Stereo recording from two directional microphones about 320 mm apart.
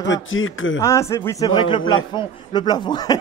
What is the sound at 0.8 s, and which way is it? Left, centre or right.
Speech, centre.